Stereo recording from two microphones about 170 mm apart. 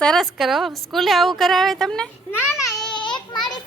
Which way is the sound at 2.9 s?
25° left (ahead or behind).